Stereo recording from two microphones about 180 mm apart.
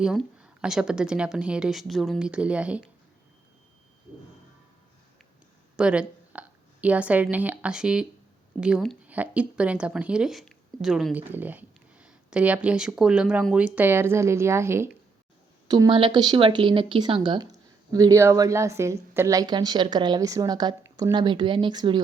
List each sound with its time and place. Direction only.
0.0 s a woman's voice: 5° right (ahead or behind)
5.7 s a woman's voice: 5° right (ahead or behind); by 22.0 s 25° right (ahead or behind)